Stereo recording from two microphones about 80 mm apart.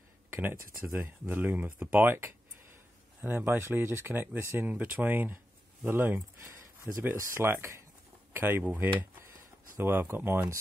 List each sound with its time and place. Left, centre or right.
0.9 s speech: right
3.2 s speech: right